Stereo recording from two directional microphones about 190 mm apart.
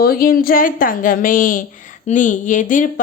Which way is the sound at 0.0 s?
50° left (ahead or behind).